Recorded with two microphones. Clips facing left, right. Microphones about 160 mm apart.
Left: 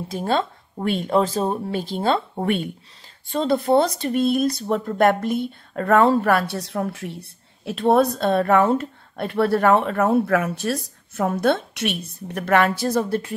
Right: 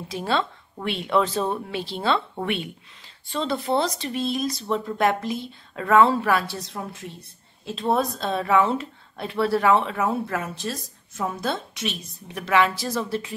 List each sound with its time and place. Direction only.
0.1 s speech: 45° left (ahead or behind)